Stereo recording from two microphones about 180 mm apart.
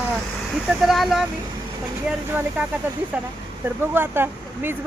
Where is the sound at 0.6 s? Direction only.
Centre (ahead or behind).